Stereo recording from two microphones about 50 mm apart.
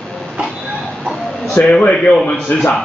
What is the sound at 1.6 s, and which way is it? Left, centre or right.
Speech, centre.